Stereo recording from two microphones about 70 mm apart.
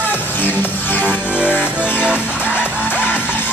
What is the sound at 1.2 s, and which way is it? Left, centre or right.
Music, centre.